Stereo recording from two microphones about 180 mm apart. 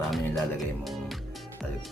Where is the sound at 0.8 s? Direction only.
Centre (ahead or behind).